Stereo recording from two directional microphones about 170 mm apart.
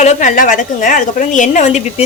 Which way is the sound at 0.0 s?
45° left (ahead or behind).